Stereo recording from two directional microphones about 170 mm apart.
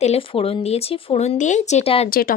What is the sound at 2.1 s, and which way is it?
Speech, 60° left (ahead or behind).